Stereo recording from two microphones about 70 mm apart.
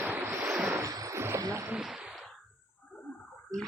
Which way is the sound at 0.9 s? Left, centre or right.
Right.